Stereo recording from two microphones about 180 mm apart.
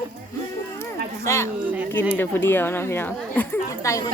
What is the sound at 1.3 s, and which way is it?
Speech, 15° left (ahead or behind).